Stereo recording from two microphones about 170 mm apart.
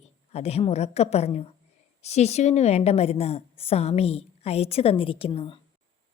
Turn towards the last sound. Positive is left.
turn(degrees=35)  # may be behind; listen again after turning